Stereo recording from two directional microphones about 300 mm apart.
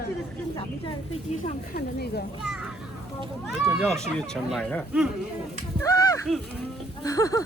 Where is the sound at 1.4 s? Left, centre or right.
Left.